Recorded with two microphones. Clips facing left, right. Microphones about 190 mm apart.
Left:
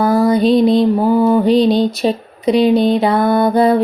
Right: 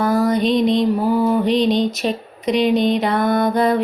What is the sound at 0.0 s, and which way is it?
Music, 30° left (ahead or behind).